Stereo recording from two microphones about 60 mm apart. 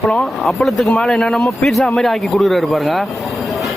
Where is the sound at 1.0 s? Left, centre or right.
Centre.